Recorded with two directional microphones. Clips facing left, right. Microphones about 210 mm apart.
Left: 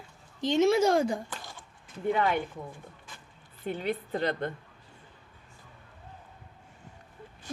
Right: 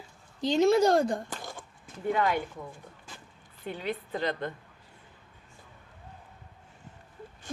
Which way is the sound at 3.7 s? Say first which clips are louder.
Left 2 dB; 45° left (ahead or behind).